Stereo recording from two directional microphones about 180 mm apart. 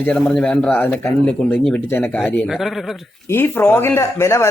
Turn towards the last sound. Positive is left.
turn(degrees=15)  # may be behind; listen again after turning